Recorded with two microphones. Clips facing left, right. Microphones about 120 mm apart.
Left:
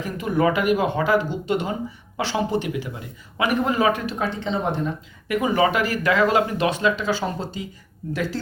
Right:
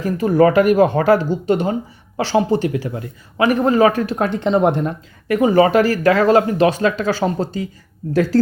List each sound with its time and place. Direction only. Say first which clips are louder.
0.0 s speech: right 7 dB; 40° right (ahead or behind)
1.3 s speech: right 6 dB; 35° right (ahead or behind)
4.4 s speech: right 11 dB; 60° right (ahead or behind)
5.3 s speech: right 7 dB; 35° right (ahead or behind)